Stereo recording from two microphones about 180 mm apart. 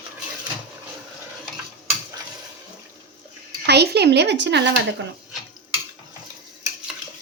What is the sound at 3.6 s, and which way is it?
Speech, 65° right (ahead or behind).